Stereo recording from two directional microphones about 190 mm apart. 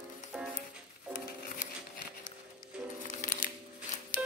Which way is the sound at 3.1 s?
45° left (ahead or behind).